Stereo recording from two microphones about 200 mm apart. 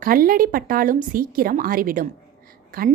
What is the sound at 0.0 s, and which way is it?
A woman's voice, 45° right (ahead or behind).